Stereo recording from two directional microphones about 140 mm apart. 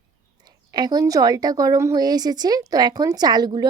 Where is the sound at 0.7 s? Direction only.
30° right (ahead or behind).